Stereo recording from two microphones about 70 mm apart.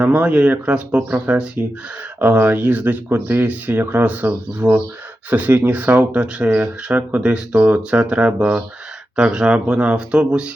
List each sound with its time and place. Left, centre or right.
0.0 s speech: right
2.1 s speech: right